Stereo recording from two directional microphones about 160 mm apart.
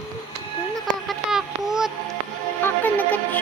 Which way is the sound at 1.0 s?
Centre (ahead or behind).